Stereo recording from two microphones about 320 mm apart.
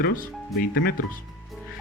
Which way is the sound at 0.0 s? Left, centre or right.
Left.